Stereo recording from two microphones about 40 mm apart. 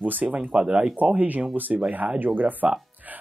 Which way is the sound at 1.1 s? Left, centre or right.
Right.